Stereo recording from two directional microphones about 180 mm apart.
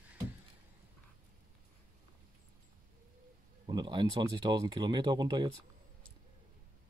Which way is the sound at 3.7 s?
25° right (ahead or behind).